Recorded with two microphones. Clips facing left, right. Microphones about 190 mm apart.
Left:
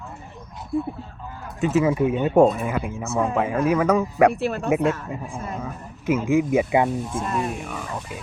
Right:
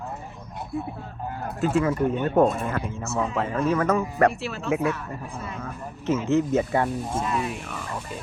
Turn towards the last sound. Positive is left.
turn(degrees=45)  # may be behind; listen again after turning